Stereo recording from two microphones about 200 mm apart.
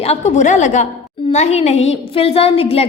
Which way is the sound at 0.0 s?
35° left (ahead or behind).